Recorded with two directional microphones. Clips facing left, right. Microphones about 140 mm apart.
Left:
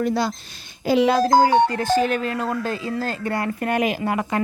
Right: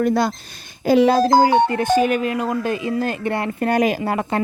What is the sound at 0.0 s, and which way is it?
Speech, 50° right (ahead or behind).